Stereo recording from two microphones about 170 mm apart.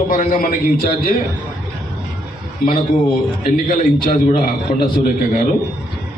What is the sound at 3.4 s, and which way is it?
A man's voice, 55° left (ahead or behind).